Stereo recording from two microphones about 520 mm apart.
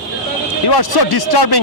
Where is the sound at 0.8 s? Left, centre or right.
Left.